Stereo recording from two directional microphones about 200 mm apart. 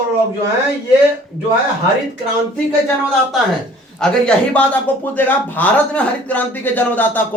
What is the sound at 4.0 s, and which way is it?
A man's voice, 5° left (ahead or behind).